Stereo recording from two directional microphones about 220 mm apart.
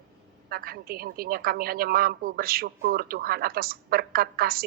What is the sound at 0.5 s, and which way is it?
A woman's voice, 45° right (ahead or behind).